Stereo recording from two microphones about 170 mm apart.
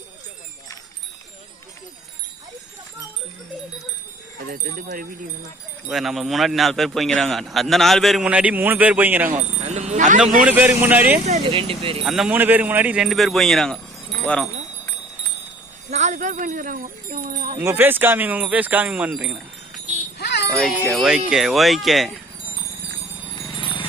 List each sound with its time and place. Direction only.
4.4 s speech: 55° right (ahead or behind)
5.9 s speech: centre (ahead or behind)
9.6 s speech: 45° right (ahead or behind)
10.4 s speech: 10° right (ahead or behind)
11.3 s speech: 35° right (ahead or behind)
12.0 s speech: 5° right (ahead or behind)
15.9 s wind chime: 45° right (ahead or behind)
17.6 s speech: 15° right (ahead or behind)
20.1 s music: 75° left (ahead or behind)
20.9 s speech: 5° right (ahead or behind)
23.3 s a sound: 30° left (ahead or behind)